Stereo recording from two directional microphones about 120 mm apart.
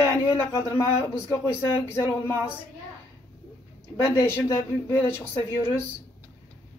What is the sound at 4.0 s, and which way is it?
A man's voice, 20° left (ahead or behind).